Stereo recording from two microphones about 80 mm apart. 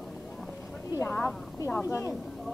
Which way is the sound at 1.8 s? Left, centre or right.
Left.